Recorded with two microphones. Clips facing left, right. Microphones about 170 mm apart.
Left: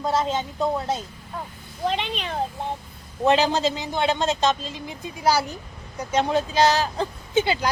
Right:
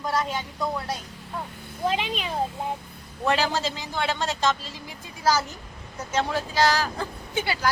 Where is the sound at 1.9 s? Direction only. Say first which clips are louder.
Even; 5° right (ahead or behind).